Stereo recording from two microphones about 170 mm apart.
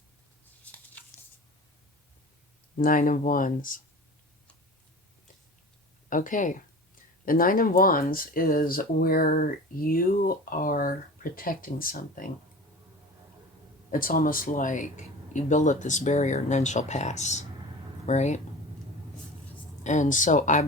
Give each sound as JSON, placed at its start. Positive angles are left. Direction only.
{"t": 0.6, "sound": "a sound", "side_deg": 10}
{"t": 2.7, "sound": "speech", "side_deg": 55}
{"t": 6.1, "sound": "speech", "side_deg": 50}
{"t": 13.9, "sound": "speech", "side_deg": 55}
{"t": 19.8, "sound": "speech", "side_deg": 45}